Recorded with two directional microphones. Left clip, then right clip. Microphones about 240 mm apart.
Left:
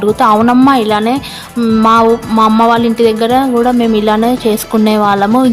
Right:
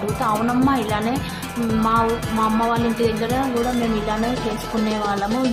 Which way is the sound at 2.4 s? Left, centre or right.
Left.